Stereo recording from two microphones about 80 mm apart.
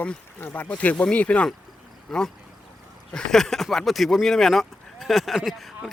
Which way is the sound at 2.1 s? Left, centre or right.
Centre.